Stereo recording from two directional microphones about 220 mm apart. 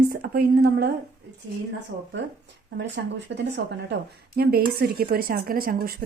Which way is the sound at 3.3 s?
50° right (ahead or behind).